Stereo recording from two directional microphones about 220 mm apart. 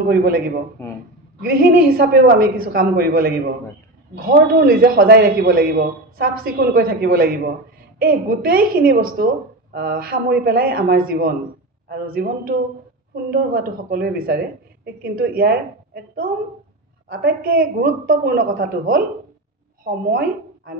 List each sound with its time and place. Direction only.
0.1 s a man's voice: 45° right (ahead or behind)
0.8 s speech: 10° left (ahead or behind)
1.4 s a woman's voice: 40° right (ahead or behind)